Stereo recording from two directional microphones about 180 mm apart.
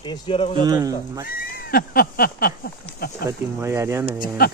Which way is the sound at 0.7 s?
20° right (ahead or behind).